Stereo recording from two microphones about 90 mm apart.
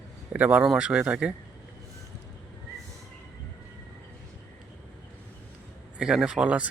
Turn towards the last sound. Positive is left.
turn(degrees=-10)  # may be behind; listen again after turning